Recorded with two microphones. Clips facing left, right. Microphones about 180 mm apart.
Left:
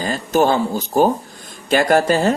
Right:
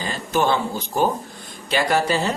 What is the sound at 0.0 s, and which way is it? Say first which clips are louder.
Speech: left 5 dB; 45° left (ahead or behind).